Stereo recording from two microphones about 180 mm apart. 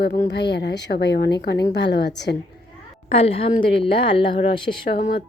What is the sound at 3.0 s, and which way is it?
A woman's voice, 35° left (ahead or behind).